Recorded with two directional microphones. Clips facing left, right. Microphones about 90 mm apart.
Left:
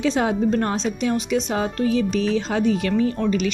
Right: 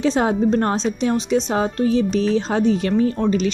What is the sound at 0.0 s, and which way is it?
A woman's voice, 35° right (ahead or behind).